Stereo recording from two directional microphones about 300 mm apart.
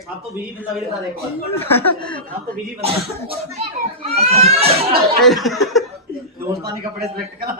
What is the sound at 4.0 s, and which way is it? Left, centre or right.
Speech, centre.